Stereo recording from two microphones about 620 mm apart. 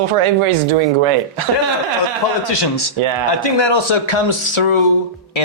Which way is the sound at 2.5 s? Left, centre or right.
Left.